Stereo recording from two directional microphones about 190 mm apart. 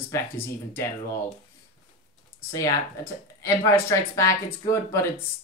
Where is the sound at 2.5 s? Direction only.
20° left (ahead or behind).